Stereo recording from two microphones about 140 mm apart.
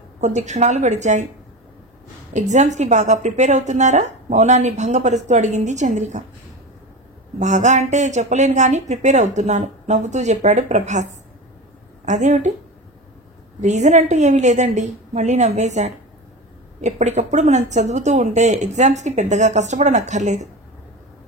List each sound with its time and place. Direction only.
0.2 s a woman's voice: 55° right (ahead or behind)
2.3 s a woman's voice: 55° right (ahead or behind)
7.3 s a woman's voice: 60° right (ahead or behind)
13.6 s a woman's voice: 60° right (ahead or behind)